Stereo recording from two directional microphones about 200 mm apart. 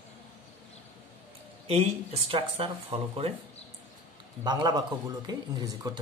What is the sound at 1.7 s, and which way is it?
Speech, 30° right (ahead or behind).